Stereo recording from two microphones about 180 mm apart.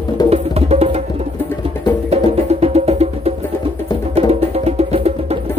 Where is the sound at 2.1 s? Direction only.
35° right (ahead or behind).